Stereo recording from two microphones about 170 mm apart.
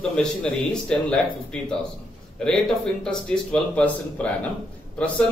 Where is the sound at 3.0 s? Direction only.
5° left (ahead or behind).